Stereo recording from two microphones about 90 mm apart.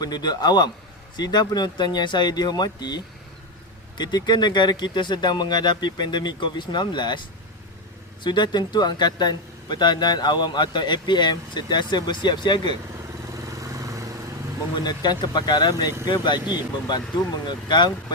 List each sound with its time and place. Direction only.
0.0 s speech: 50° left (ahead or behind)
13.3 s vehicle: 40° right (ahead or behind)
14.8 s speech: 50° left (ahead or behind)